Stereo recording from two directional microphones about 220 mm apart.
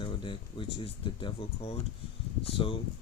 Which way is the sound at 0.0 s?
20° left (ahead or behind).